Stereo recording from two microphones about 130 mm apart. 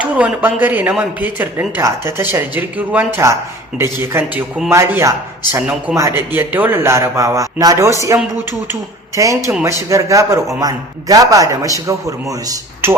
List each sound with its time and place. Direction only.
0.0 s a man's voice: 10° right (ahead or behind); by 7.9 s 25° right (ahead or behind)
9.1 s a man's voice: 25° right (ahead or behind)